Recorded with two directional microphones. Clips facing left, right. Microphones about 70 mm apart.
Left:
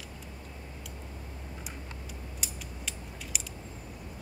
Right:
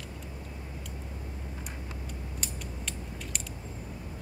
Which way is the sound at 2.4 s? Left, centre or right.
Centre.